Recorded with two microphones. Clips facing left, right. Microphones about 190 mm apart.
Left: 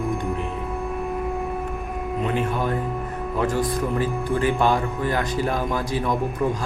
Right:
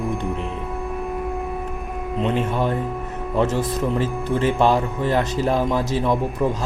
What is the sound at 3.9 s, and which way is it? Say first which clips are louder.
Speech: right 1 dB; 25° right (ahead or behind).